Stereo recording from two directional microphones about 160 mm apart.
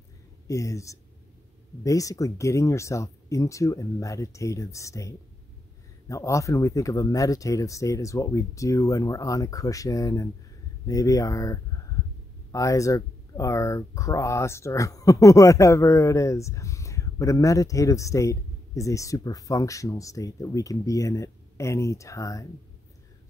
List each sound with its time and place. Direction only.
0.5 s speech: 20° left (ahead or behind)